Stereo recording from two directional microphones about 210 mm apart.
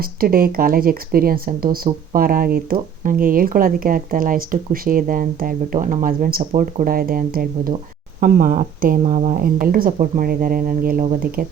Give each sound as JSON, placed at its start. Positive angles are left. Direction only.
{"t": 0.0, "sound": "speech", "side_deg": -45}